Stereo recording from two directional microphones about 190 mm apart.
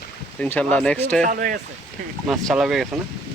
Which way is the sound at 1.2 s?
45° right (ahead or behind).